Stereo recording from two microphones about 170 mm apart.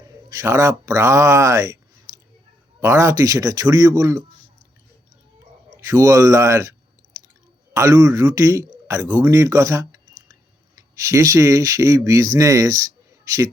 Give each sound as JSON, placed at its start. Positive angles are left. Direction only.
{"t": 0.0, "sound": "speech", "side_deg": -20}
{"t": 2.8, "sound": "speech", "side_deg": -15}
{"t": 5.7, "sound": "a man's voice", "side_deg": -20}